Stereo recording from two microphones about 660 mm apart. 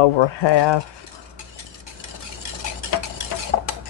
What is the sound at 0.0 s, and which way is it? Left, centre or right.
Speech, left.